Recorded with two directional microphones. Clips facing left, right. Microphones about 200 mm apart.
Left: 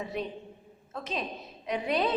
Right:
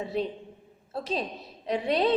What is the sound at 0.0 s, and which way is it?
A woman's voice, 30° right (ahead or behind).